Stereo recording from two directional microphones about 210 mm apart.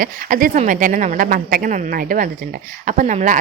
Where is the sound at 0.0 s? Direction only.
40° right (ahead or behind).